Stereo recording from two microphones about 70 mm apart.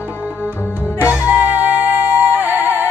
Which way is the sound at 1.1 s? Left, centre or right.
Centre.